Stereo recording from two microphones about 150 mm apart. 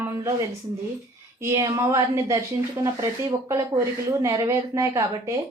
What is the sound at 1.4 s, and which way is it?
A woman's voice, 20° right (ahead or behind).